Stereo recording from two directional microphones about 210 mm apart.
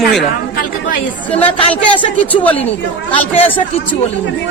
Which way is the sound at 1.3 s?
5° left (ahead or behind).